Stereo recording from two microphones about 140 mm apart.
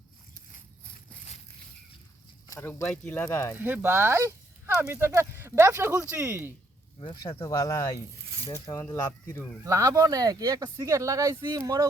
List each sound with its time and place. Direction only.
2.5 s speech: 20° left (ahead or behind)
2.8 s speech: 5° left (ahead or behind)
3.2 s speech: 20° left (ahead or behind)
3.6 s speech: 15° right (ahead or behind)
7.0 s speech: 35° left (ahead or behind); by 9.5 s 20° left (ahead or behind)
9.6 s speech: 20° right (ahead or behind)